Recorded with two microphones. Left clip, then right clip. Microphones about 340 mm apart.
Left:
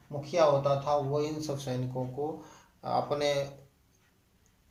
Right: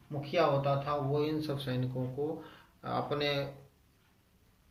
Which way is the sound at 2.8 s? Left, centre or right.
Centre.